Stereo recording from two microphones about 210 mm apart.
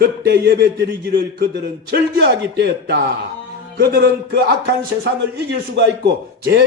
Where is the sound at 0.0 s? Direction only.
50° right (ahead or behind).